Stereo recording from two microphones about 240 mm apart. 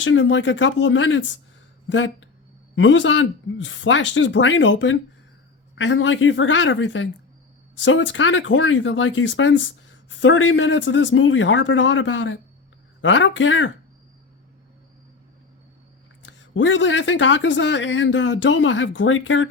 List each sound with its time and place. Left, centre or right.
0.0 s speech: left
16.2 s speech: left